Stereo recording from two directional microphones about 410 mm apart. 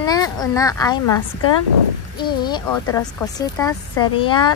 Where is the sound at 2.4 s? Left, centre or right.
Centre.